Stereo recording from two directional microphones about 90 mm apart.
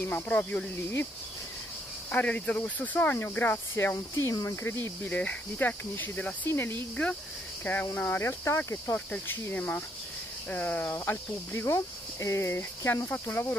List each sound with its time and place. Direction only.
0.0 s speech: 20° left (ahead or behind)
2.0 s speech: 15° left (ahead or behind)
5.0 s speech: 15° left (ahead or behind)
9.1 s speech: 20° left (ahead or behind)